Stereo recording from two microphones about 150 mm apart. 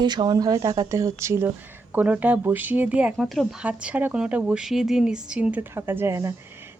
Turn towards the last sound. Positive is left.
turn(degrees=-20)  # may be behind; listen again after turning